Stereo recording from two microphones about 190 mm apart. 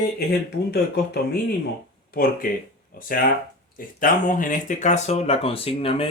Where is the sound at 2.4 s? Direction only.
45° left (ahead or behind).